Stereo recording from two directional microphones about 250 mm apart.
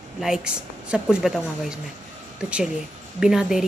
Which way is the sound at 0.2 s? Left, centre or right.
Centre.